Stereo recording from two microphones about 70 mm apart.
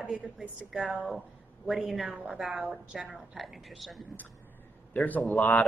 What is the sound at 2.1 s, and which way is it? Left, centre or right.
Speech, centre.